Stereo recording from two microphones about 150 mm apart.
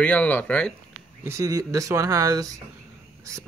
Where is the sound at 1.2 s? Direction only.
20° right (ahead or behind).